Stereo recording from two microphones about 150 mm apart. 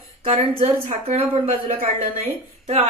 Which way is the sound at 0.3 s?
45° right (ahead or behind).